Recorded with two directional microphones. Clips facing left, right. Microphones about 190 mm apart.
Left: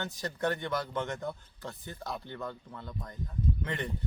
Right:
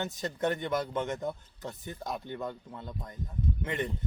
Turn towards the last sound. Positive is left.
turn(degrees=-20)  # may be behind; listen again after turning